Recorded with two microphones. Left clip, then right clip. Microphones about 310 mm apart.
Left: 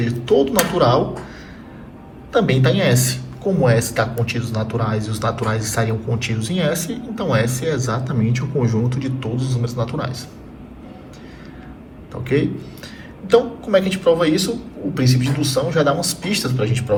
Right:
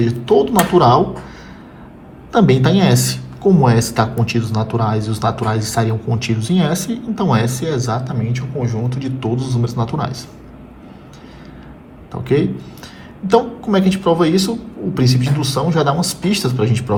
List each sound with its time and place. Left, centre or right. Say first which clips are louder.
0.3 s speech: right 2 dB; centre
2.3 s speech: right 3 dB; centre
12.2 s speech: right 3 dB; centre
13.7 s speech: even; centre